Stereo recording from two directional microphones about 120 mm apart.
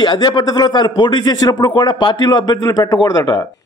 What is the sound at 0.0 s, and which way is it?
Speech, 40° left (ahead or behind).